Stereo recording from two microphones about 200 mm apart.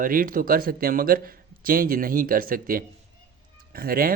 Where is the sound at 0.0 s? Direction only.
45° right (ahead or behind).